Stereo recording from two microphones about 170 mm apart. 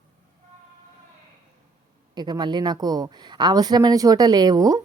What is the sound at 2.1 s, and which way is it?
Speech, 25° right (ahead or behind).